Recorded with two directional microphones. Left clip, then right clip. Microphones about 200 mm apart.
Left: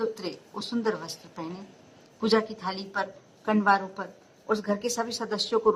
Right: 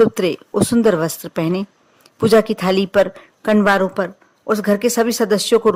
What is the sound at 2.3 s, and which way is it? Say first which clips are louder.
Speech: right 12 dB; 15° right (ahead or behind).